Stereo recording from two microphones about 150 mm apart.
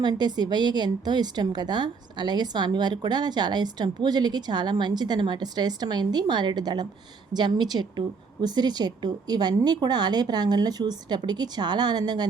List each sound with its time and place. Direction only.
0.0 s speech: 25° right (ahead or behind)